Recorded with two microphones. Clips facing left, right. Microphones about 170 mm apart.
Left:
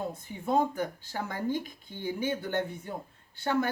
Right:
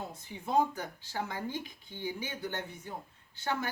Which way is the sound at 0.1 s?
55° left (ahead or behind).